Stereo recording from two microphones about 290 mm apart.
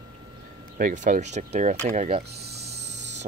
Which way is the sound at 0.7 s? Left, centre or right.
Right.